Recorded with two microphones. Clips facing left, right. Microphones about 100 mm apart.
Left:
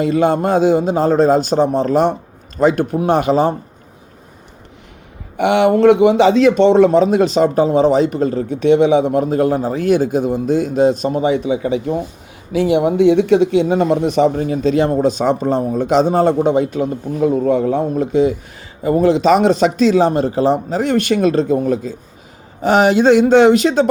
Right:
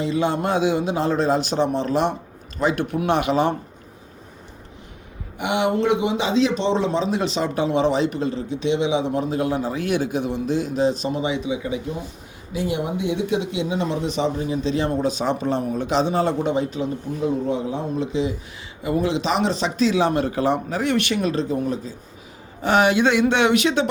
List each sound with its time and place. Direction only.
0.0 s a man's voice: 50° left (ahead or behind)
5.4 s a man's voice: 60° left (ahead or behind)
11.6 s a man's voice: 70° left (ahead or behind); by 20.8 s 30° left (ahead or behind)
20.8 s a man's voice: 40° left (ahead or behind)
22.6 s speech: 40° left (ahead or behind)